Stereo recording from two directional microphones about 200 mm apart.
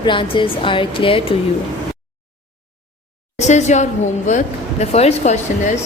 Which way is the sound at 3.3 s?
35° left (ahead or behind).